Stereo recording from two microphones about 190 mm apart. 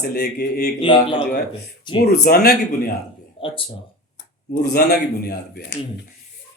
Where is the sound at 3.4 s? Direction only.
30° left (ahead or behind).